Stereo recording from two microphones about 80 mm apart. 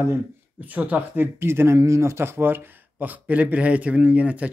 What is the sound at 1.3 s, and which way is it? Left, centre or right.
Speech, right.